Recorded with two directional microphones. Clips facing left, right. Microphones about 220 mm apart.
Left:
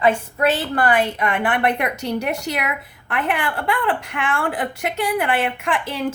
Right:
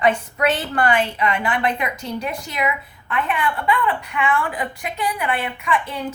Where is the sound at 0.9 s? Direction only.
45° left (ahead or behind); by 6.0 s 85° left.